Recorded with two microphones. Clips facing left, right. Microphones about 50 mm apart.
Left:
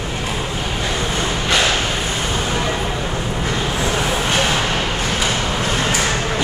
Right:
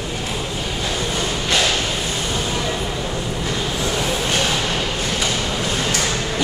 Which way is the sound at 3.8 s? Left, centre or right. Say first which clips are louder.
Left 2 dB; left.